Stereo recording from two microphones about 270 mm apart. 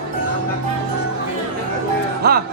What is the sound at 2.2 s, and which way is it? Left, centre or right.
Music, right.